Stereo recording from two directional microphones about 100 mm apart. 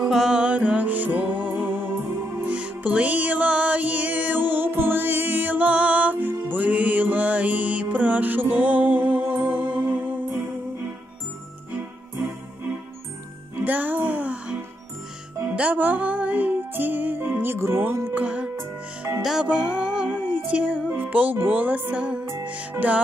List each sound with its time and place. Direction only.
0.0 s music: 5° right (ahead or behind)
13.7 s music: 20° right (ahead or behind)
18.6 s music: 25° right (ahead or behind)
19.2 s music: 10° right (ahead or behind)